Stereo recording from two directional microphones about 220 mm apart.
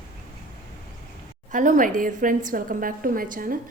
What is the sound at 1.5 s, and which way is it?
A woman's voice, 35° right (ahead or behind).